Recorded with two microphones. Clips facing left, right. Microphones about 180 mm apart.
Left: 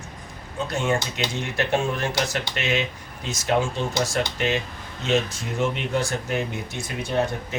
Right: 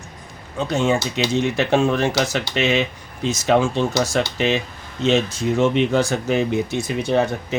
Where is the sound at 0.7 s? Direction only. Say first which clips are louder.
Right 5 dB; 90° right.